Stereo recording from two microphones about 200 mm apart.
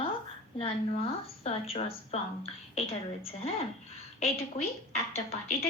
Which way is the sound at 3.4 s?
30° left (ahead or behind).